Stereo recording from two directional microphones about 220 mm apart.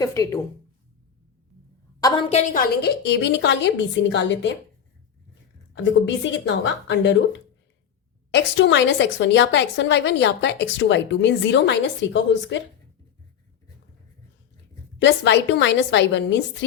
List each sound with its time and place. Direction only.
0.0 s speech: 15° left (ahead or behind)
2.0 s a woman's voice: 20° left (ahead or behind); by 4.5 s 55° left (ahead or behind)
5.7 s a woman's voice: 55° left (ahead or behind)
15.0 s a woman's voice: 55° left (ahead or behind)